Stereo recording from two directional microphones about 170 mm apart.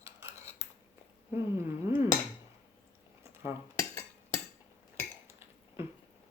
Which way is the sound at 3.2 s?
15° right (ahead or behind).